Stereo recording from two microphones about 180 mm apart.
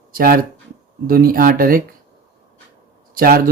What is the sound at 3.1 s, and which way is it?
Speech, 55° right (ahead or behind).